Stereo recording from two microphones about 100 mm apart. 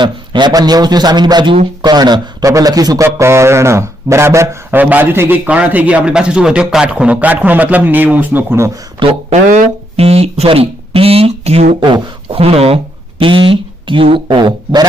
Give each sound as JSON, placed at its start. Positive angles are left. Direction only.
{"t": 0.0, "sound": "a man's voice", "side_deg": -50}
{"t": 9.0, "sound": "speech", "side_deg": -60}
{"t": 10.0, "sound": "speech", "side_deg": -90}
{"t": 11.8, "sound": "speech", "side_deg": -55}
{"t": 12.4, "sound": "speech", "side_deg": -80}